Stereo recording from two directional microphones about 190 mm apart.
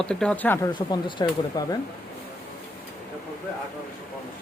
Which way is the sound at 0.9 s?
20° left (ahead or behind).